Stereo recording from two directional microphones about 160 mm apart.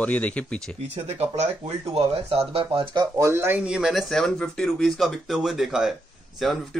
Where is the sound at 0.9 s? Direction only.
40° right (ahead or behind).